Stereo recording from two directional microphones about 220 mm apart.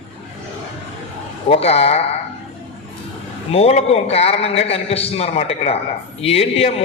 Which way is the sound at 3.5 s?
30° left (ahead or behind).